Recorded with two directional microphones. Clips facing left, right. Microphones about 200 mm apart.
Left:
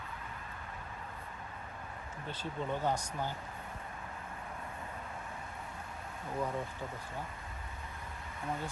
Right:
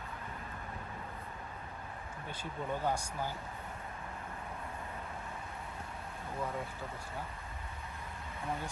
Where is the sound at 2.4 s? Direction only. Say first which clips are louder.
Left 1 dB; 10° right (ahead or behind).